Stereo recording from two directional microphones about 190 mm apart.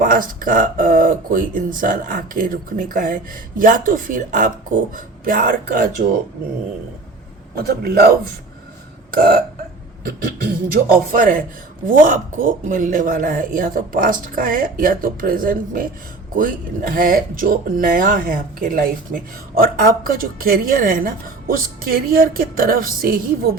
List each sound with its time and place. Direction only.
0.0 s speech: 45° right (ahead or behind)
7.5 s a man's voice: 55° right (ahead or behind)